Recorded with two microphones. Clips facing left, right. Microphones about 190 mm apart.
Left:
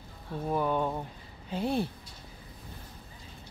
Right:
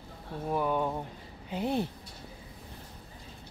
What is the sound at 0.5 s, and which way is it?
Speech, 10° right (ahead or behind).